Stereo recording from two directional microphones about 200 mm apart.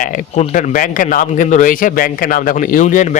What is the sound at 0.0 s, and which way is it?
Speech, 40° left (ahead or behind).